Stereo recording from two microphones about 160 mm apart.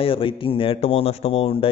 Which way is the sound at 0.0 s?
35° left (ahead or behind).